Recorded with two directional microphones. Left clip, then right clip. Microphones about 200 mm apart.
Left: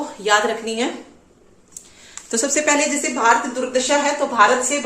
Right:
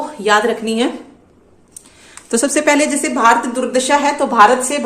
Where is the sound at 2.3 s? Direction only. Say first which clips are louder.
Right 5 dB; 35° right (ahead or behind).